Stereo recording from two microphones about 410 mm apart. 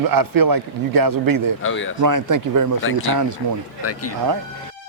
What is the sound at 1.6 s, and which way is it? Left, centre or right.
Speech, left.